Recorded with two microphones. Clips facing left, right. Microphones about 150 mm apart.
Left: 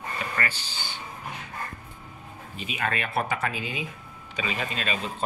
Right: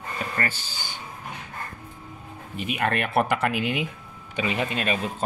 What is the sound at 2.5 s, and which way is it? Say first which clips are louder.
Speech: right 5 dB; 60° right (ahead or behind).